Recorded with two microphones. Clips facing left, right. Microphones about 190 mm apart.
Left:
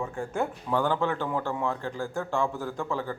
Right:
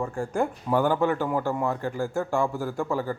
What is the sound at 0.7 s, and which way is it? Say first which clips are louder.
A man's voice: right 4 dB; 10° right (ahead or behind).